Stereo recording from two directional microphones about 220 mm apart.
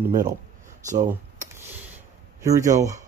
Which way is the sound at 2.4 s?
15° right (ahead or behind).